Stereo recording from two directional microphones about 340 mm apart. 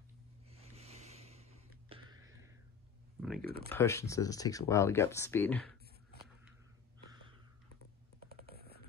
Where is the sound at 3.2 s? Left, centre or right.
Centre.